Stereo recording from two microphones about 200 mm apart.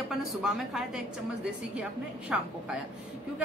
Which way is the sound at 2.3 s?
5° right (ahead or behind).